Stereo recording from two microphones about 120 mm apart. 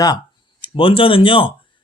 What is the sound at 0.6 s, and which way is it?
Speech, 45° left (ahead or behind).